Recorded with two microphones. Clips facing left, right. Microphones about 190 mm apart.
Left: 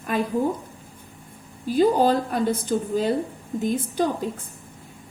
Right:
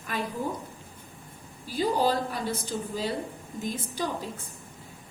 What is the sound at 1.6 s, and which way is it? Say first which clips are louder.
A woman's voice: left 7 dB; 50° left (ahead or behind).